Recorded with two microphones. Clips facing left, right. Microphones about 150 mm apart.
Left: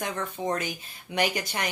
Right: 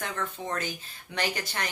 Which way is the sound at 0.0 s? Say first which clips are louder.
Left 4 dB; 15° left (ahead or behind).